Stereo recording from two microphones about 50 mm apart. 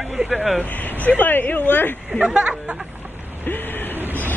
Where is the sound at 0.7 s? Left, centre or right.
Left.